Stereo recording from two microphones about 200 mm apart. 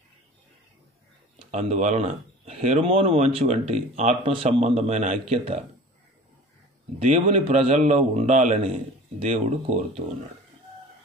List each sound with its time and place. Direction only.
1.5 s speech: 35° right (ahead or behind)
7.0 s speech: 30° right (ahead or behind)